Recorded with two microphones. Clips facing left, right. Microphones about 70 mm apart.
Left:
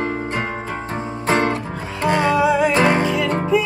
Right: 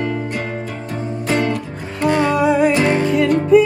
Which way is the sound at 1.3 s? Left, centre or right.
Left.